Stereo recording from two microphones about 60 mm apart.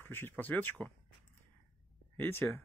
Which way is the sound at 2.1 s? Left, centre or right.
Left.